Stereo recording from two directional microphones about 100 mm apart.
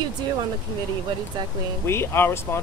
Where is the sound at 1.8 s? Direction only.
25° left (ahead or behind).